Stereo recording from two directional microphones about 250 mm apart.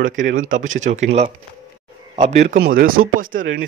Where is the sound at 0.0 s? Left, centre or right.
Right.